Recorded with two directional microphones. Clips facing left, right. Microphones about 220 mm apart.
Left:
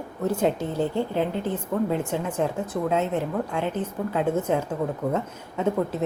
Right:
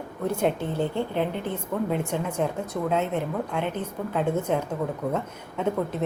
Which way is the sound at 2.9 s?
5° left (ahead or behind).